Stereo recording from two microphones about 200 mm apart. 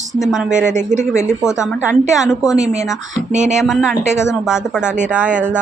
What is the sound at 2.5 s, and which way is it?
Speech, 35° right (ahead or behind).